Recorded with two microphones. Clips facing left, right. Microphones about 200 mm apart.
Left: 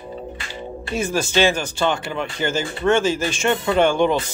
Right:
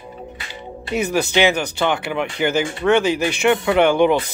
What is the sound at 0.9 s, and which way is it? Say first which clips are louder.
Speech: right 3 dB; 20° right (ahead or behind).